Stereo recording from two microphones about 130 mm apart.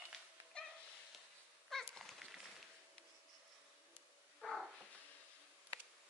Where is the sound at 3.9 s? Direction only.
Centre (ahead or behind).